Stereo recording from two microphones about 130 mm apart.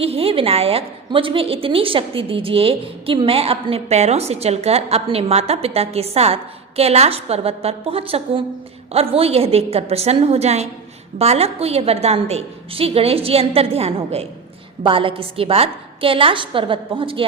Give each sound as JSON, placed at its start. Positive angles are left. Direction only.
{"t": 0.0, "sound": "a woman's voice", "side_deg": -50}